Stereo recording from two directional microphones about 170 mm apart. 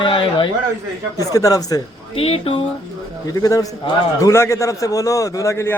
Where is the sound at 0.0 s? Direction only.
30° left (ahead or behind).